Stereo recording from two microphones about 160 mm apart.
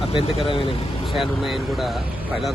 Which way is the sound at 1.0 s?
Centre (ahead or behind).